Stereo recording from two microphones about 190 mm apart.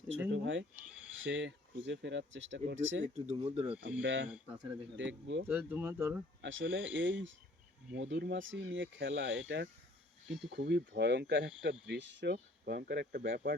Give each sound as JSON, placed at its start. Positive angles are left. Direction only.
{"t": 0.3, "sound": "speech", "side_deg": -75}
{"t": 3.2, "sound": "speech", "side_deg": -30}
{"t": 4.0, "sound": "speech", "side_deg": -75}
{"t": 4.3, "sound": "speech", "side_deg": -10}
{"t": 4.9, "sound": "speech", "side_deg": -70}
{"t": 5.5, "sound": "speech", "side_deg": -10}
{"t": 6.4, "sound": "speech", "side_deg": -75}
{"t": 10.5, "sound": "speech", "side_deg": -65}